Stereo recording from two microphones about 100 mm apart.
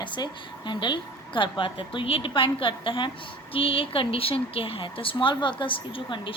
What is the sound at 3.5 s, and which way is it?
A woman's voice, 65° left (ahead or behind).